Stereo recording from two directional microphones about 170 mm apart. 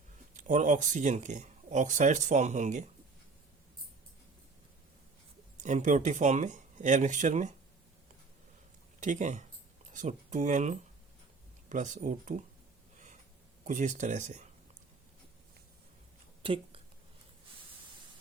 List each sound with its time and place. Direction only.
0.3 s speech: 50° right (ahead or behind)
5.6 s speech: 45° right (ahead or behind)
9.0 s speech: 45° right (ahead or behind)
13.7 s speech: 50° right (ahead or behind)
16.4 s a sound: 35° right (ahead or behind)